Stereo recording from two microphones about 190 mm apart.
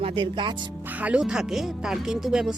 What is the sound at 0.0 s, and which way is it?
Speech, 25° right (ahead or behind).